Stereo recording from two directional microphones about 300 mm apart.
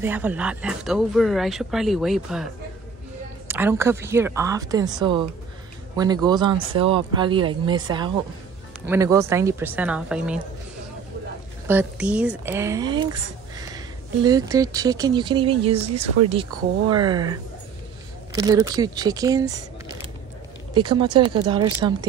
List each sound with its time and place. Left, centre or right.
0.0 s a woman's voice: centre
5.9 s a woman's voice: centre
11.6 s a woman's voice: centre
16.9 s a woman's voice: centre
20.7 s a woman's voice: centre